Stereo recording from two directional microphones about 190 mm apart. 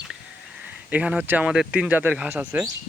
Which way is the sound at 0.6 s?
10° right (ahead or behind).